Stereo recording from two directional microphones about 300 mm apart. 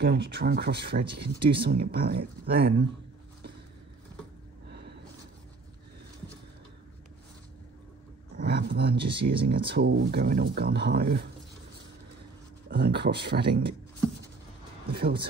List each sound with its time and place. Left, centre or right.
0.0 s speech: right
4.6 s a sound: right
8.4 s speech: right
8.9 s speech: centre
9.5 s speech: right
12.6 s speech: right
14.9 s speech: right